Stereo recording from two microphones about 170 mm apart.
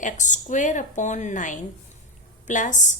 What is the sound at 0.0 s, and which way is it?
A woman's voice, 45° left (ahead or behind).